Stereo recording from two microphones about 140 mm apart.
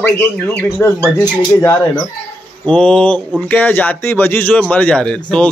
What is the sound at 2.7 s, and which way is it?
Speech, 10° left (ahead or behind).